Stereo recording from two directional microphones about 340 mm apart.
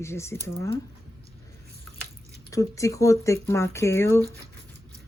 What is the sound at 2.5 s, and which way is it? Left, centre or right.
Speech, centre.